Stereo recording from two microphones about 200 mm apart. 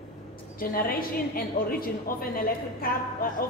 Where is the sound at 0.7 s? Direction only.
45° left (ahead or behind).